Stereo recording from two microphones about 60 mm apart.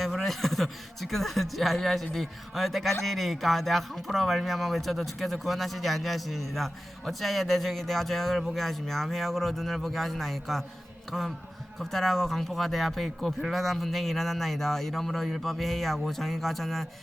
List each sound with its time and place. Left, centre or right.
0.0 s speech: centre
11.8 s speech: centre